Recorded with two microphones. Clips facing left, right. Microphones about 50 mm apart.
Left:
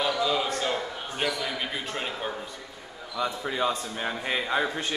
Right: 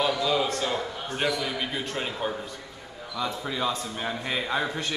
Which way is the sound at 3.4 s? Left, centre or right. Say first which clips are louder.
Left 2 dB; left.